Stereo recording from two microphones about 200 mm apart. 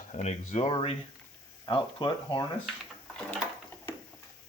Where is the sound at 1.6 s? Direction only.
20° left (ahead or behind).